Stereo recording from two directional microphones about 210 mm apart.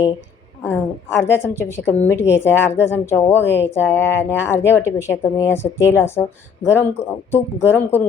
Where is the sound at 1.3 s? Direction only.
10° left (ahead or behind).